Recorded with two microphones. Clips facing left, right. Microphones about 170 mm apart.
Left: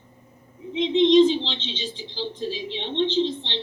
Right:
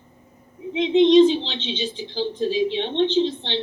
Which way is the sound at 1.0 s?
10° right (ahead or behind).